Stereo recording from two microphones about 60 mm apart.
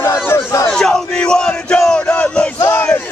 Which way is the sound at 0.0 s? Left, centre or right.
Left.